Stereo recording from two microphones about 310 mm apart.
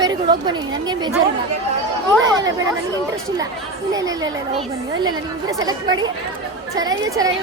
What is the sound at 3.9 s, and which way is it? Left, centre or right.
A woman's voice, centre.